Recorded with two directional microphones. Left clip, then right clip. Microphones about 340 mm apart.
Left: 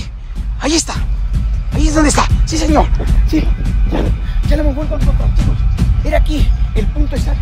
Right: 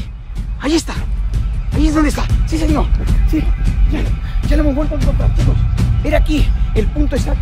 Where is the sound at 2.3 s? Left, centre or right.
Centre.